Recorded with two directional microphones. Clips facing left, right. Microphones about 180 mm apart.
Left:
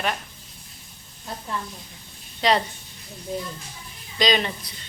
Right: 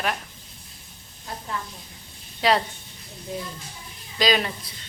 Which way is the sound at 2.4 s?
5° right (ahead or behind).